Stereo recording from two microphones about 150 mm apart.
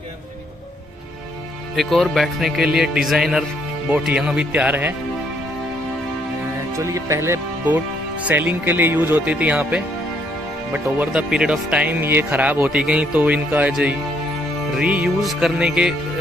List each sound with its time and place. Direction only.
1.8 s speech: centre (ahead or behind)
6.7 s speech: 20° right (ahead or behind)